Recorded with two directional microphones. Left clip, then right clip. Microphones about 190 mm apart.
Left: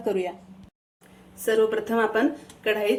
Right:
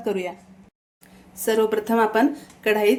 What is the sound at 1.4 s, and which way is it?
Speech, 60° right (ahead or behind).